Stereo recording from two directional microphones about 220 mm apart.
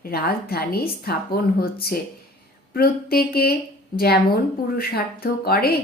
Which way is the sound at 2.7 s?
45° left (ahead or behind).